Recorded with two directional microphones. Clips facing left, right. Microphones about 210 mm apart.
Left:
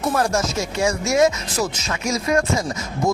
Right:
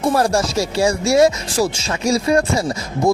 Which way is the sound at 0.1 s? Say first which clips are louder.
Right 3 dB; 35° right (ahead or behind).